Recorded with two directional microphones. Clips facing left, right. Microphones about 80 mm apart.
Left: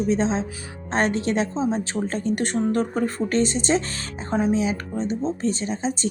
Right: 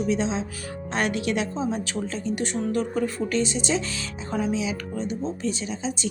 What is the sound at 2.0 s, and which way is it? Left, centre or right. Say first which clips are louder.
A woman's voice: left 4 dB; left.